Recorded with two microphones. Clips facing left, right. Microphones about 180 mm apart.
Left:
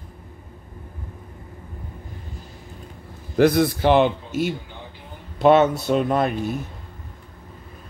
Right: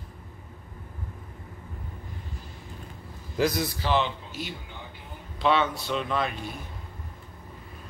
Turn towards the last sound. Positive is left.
turn(degrees=45)  # may be behind; listen again after turning